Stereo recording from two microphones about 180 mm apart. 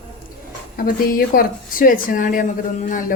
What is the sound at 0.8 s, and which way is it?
A woman's voice, 50° left (ahead or behind).